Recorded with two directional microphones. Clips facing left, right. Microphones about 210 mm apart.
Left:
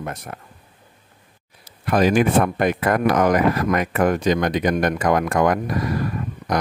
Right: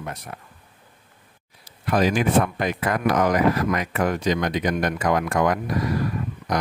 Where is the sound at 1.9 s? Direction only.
55° left (ahead or behind).